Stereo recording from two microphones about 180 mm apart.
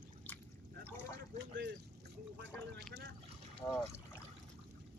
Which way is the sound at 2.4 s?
70° right (ahead or behind).